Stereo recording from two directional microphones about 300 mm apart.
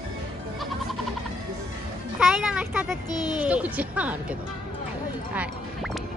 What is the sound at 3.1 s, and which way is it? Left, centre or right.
Speech, centre.